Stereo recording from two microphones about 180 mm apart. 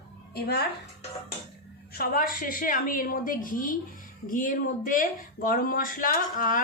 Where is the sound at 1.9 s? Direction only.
55° left (ahead or behind).